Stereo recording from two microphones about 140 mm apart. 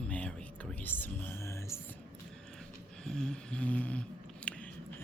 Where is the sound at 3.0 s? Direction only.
5° left (ahead or behind).